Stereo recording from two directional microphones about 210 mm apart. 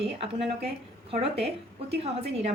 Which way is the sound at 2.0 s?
30° right (ahead or behind).